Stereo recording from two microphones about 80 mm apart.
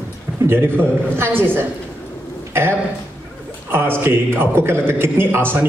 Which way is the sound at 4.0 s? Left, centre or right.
Right.